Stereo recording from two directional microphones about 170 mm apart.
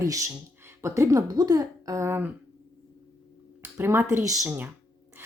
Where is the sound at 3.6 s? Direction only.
15° right (ahead or behind).